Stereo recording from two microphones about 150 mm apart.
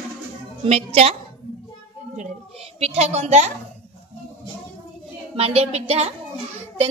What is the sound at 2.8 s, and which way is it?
Speech, 45° right (ahead or behind).